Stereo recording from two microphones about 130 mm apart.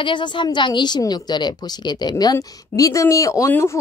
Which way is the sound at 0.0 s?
40° left (ahead or behind).